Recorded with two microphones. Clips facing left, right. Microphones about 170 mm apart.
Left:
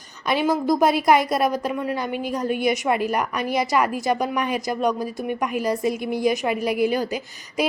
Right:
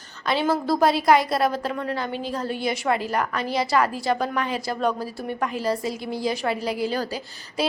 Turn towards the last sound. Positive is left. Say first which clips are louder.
# left 3 dB
turn(degrees=15)  # may be behind; listen again after turning